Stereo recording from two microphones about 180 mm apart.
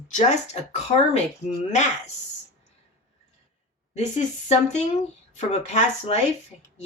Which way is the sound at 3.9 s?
40° left (ahead or behind).